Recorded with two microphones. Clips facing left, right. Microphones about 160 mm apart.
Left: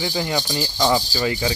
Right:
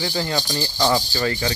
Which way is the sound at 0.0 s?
15° left (ahead or behind).